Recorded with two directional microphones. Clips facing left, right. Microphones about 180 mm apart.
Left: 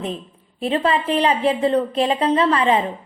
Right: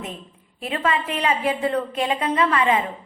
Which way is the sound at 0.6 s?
30° left (ahead or behind).